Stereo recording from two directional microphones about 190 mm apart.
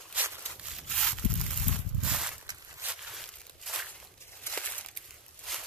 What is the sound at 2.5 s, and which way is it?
Walk, 20° right (ahead or behind).